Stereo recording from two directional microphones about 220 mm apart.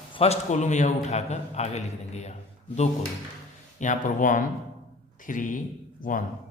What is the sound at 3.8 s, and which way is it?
A man's voice, 35° left (ahead or behind).